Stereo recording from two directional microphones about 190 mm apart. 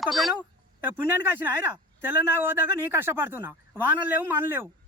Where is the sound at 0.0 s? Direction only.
Centre (ahead or behind).